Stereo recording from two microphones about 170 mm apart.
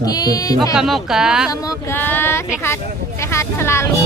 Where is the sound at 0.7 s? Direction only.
Centre (ahead or behind).